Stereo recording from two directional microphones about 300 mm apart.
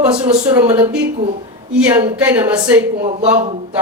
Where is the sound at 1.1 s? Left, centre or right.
Right.